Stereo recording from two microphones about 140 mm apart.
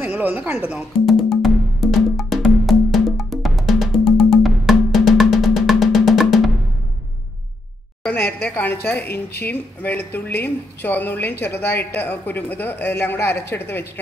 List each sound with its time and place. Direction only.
0.0 s music: 10° right (ahead or behind)
4.4 s drum: centre (ahead or behind)
8.0 s a woman's voice: 10° left (ahead or behind)